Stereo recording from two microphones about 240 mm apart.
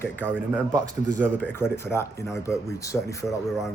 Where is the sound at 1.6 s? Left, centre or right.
Centre.